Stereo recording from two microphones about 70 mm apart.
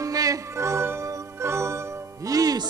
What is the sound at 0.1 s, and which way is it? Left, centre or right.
Music, right.